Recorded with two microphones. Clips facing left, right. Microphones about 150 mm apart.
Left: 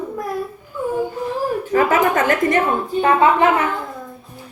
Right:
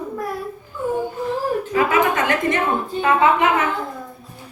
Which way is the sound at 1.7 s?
45° left (ahead or behind).